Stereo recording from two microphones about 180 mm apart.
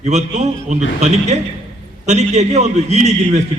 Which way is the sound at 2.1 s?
40° right (ahead or behind).